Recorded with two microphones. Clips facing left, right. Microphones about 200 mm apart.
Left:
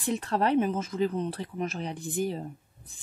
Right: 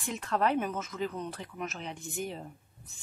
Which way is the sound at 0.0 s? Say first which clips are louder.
Left 3 dB; 35° left (ahead or behind).